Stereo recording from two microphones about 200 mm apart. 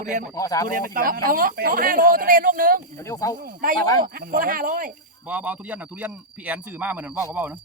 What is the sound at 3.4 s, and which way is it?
Speech, 45° right (ahead or behind).